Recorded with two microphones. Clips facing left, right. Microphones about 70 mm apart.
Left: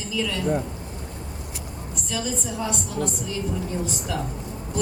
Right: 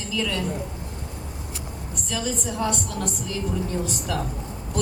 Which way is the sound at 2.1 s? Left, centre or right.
Centre.